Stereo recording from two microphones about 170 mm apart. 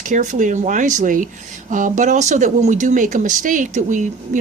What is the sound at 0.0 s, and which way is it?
Speech, 45° right (ahead or behind).